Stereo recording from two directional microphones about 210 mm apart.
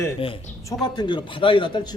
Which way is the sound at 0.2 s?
25° left (ahead or behind).